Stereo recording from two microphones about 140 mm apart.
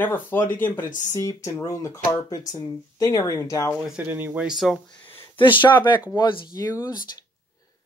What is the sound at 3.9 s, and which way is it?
Speech, 15° right (ahead or behind).